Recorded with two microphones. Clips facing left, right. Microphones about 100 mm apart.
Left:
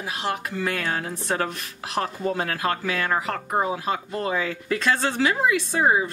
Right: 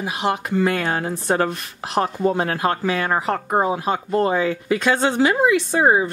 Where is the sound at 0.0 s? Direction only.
20° right (ahead or behind).